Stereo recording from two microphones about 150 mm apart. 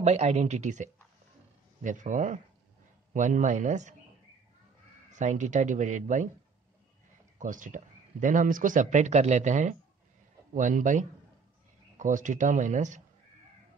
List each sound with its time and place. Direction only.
0.0 s speech: 45° right (ahead or behind)
5.1 s speech: 55° right (ahead or behind)
7.3 s speech: 60° right (ahead or behind)